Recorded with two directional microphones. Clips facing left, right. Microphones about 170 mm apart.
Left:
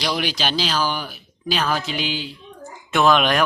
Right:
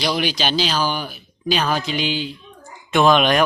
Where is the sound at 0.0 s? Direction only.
5° right (ahead or behind).